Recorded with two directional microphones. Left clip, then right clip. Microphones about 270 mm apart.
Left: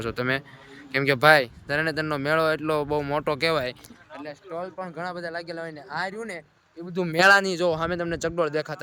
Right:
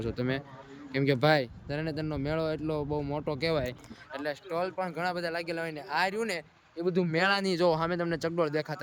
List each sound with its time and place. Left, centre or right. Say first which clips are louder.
0.0 s speech: left 6 dB; centre
4.1 s a sound: right 3 dB; centre
4.4 s speech: left 1 dB; centre